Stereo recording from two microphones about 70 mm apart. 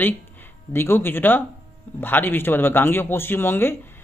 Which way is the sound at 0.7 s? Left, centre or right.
Left.